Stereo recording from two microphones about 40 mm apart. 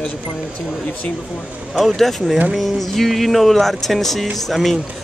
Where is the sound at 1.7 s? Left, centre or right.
Centre.